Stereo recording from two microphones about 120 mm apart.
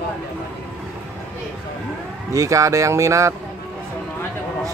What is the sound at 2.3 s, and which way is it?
Speech, 25° right (ahead or behind).